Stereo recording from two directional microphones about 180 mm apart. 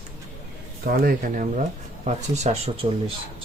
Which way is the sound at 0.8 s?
55° right (ahead or behind).